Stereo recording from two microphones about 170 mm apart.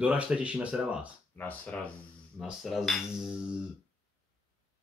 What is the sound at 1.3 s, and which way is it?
Speech, 10° left (ahead or behind).